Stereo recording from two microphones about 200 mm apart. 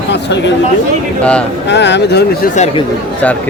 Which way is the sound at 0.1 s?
60° left (ahead or behind).